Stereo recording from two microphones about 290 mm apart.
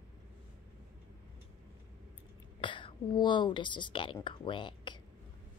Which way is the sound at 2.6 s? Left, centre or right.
Centre.